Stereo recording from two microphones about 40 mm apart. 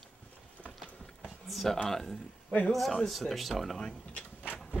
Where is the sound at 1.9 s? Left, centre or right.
Centre.